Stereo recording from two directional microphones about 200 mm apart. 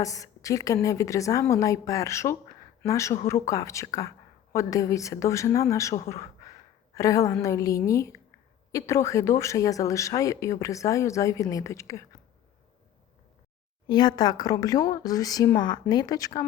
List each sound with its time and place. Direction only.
0.0 s speech: 15° left (ahead or behind)
6.4 s a sound: 15° left (ahead or behind)
7.3 s speech: 15° left (ahead or behind)
13.8 s speech: 20° left (ahead or behind)